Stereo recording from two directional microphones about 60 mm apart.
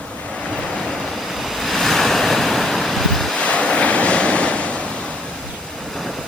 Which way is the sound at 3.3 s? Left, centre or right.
Left.